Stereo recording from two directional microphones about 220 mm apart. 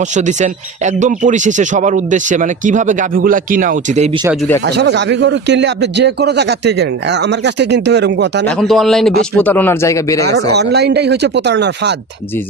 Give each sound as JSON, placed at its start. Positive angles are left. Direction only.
{"t": 0.1, "sound": "speech", "side_deg": -35}
{"t": 4.7, "sound": "a man's voice", "side_deg": -50}
{"t": 8.5, "sound": "a man's voice", "side_deg": 0}
{"t": 10.3, "sound": "a man's voice", "side_deg": -50}